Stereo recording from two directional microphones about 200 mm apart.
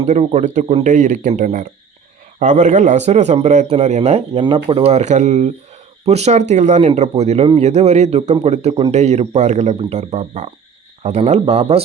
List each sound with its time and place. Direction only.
0.0 s speech: 30° right (ahead or behind)